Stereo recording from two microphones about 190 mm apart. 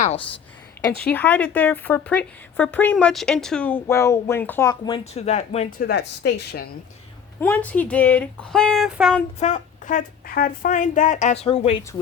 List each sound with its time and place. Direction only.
1.1 s a woman's voice: 10° left (ahead or behind)
4.7 s speech: 30° left (ahead or behind)
5.7 s a woman's voice: 55° left (ahead or behind)
7.3 s a woman's voice: 10° left (ahead or behind)
9.4 s speech: 40° left (ahead or behind)